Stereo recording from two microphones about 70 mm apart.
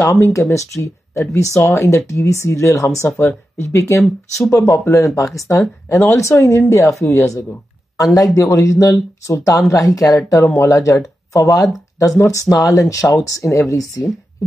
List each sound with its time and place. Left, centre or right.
0.0 s speech: left
0.3 s speech: left
3.1 s speech: left
5.9 s speech: left
6.1 s speech: left
8.0 s speech: left